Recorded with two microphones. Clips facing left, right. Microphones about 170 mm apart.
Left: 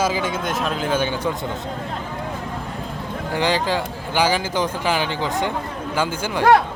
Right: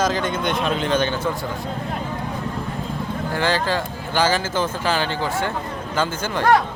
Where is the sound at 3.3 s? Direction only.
15° left (ahead or behind).